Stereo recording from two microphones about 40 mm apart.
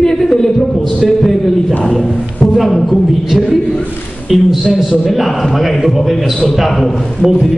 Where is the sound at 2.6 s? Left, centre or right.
Centre.